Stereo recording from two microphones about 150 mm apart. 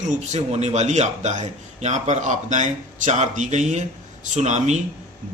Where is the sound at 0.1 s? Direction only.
50° right (ahead or behind).